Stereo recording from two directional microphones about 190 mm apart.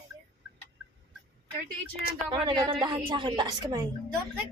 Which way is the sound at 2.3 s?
25° right (ahead or behind).